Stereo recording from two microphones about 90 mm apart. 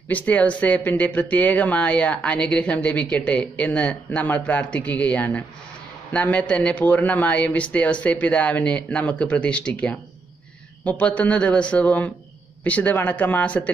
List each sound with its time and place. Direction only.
0.1 s speech: 15° left (ahead or behind)